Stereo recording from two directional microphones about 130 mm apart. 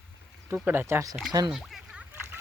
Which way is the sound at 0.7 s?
20° right (ahead or behind).